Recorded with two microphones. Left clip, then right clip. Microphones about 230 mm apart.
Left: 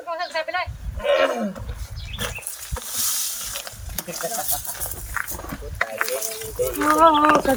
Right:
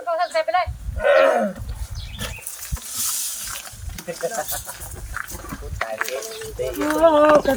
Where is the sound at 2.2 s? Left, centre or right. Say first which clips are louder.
Left 3 dB; centre.